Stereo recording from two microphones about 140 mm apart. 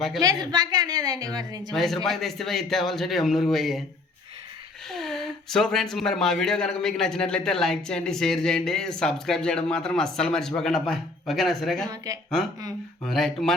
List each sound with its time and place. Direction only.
0.2 s a woman's voice: 25° right (ahead or behind)
1.7 s speech: centre (ahead or behind)
4.9 s speech: 5° left (ahead or behind)
13.1 s speech: 5° left (ahead or behind)